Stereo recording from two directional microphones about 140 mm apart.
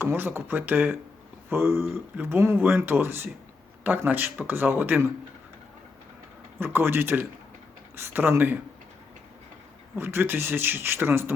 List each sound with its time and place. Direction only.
0.0 s speech: 15° right (ahead or behind)
6.6 s speech: 15° right (ahead or behind)
9.9 s speech: 15° right (ahead or behind)